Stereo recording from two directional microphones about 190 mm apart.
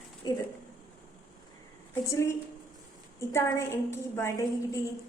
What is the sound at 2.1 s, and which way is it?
A woman's voice, 15° left (ahead or behind).